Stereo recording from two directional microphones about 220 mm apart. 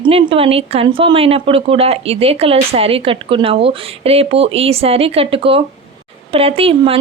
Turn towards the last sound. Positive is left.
turn(degrees=-25)  # may be behind; listen again after turning